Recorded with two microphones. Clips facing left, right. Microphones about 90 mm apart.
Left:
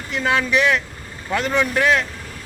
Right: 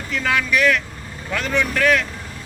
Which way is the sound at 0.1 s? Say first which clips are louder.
Left 1 dB; 30° left (ahead or behind).